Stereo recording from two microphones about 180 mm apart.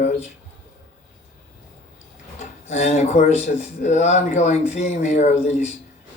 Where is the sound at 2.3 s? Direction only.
40° left (ahead or behind).